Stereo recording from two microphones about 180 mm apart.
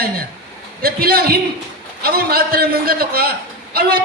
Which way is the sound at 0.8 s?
55° right (ahead or behind).